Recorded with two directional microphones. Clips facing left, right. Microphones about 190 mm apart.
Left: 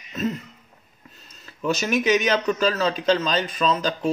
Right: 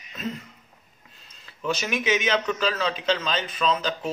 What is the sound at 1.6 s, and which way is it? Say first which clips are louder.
A man's voice: left 5 dB; 45° left (ahead or behind).